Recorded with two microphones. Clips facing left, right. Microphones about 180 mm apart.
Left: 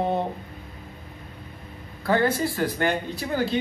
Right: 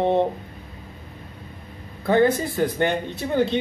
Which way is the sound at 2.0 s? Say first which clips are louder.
Right 4 dB; 20° right (ahead or behind).